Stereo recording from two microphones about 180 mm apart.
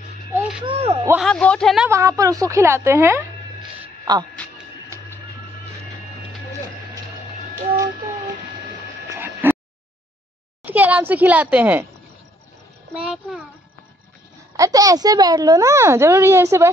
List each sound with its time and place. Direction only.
0.3 s a sound: 10° right (ahead or behind)
0.7 s speech: 30° right (ahead or behind)
1.2 s speech: 5° left (ahead or behind)
1.9 s a child's voice: 15° right (ahead or behind)
3.8 s a sound: 20° right (ahead or behind)
9.1 s a sound: 10° right (ahead or behind)
10.6 s a child's voice: 10° right (ahead or behind)
12.9 s speech: 5° right (ahead or behind)
14.6 s a child's voice: 20° right (ahead or behind)